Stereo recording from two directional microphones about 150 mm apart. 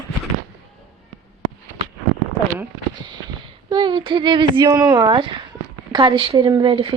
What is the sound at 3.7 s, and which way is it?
Speech, 30° right (ahead or behind).